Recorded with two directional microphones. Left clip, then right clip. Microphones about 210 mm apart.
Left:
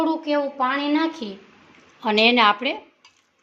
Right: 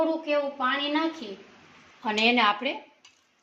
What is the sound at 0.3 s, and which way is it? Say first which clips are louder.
Speech: left 4 dB; 55° left (ahead or behind).